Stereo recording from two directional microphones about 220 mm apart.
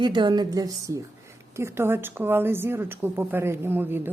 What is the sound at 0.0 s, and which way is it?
A woman's voice, 20° right (ahead or behind).